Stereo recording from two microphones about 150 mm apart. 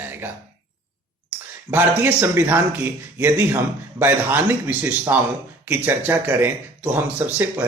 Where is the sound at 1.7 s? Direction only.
15° right (ahead or behind).